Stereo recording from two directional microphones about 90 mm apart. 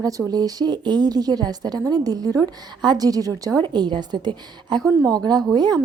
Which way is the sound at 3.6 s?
55° right (ahead or behind).